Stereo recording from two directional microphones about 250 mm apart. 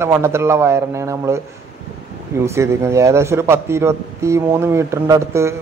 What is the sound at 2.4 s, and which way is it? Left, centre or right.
A man's voice, centre.